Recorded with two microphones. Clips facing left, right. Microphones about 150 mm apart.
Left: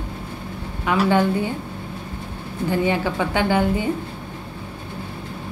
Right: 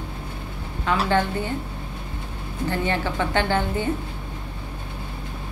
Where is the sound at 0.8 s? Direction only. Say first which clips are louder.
Left 4 dB; 15° left (ahead or behind).